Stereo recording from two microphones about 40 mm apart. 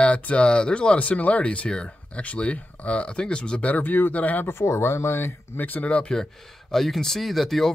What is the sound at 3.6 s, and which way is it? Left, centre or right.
Speech, left.